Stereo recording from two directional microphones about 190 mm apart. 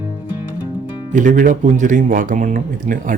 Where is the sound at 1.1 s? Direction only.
45° right (ahead or behind).